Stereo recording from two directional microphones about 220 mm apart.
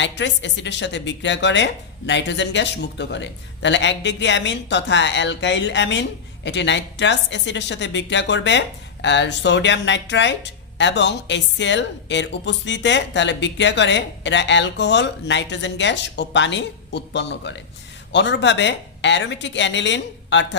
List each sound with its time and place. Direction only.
0.0 s speech: 55° left (ahead or behind)